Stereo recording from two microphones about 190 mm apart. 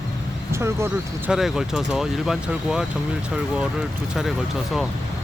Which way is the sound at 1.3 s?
Centre (ahead or behind).